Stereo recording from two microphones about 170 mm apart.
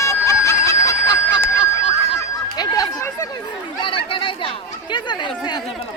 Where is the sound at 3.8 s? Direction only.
30° left (ahead or behind).